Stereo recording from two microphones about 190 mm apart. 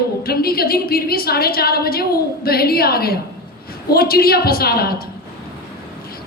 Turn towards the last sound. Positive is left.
turn(degrees=55)  # may be behind; listen again after turning